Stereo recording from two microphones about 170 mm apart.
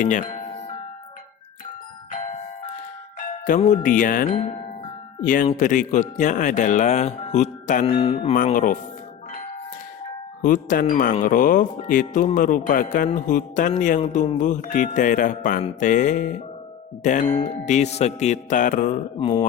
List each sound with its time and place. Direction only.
0.0 s music: 45° left (ahead or behind)
3.2 s speech: 50° left (ahead or behind)
7.9 s mantra: 35° left (ahead or behind)
8.5 s speech: 50° left (ahead or behind)
10.4 s speech: 50° left (ahead or behind)